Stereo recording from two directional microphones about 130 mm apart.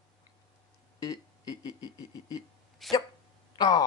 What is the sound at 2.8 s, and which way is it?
Speech, centre (ahead or behind).